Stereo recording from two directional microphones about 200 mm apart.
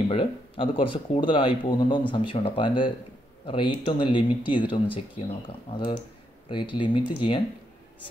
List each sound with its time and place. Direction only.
0.1 s speech: 25° left (ahead or behind)